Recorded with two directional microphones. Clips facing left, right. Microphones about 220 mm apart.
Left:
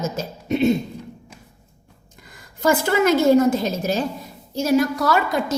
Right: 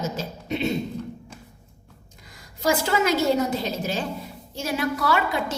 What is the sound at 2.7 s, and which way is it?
A woman's voice, 55° left (ahead or behind).